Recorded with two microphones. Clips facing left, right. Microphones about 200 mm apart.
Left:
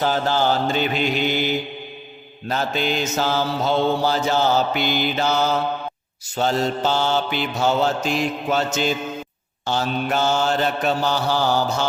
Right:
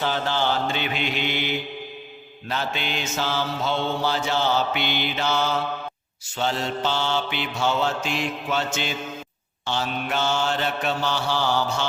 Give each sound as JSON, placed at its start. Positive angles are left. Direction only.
{"t": 0.0, "sound": "mantra", "side_deg": 40}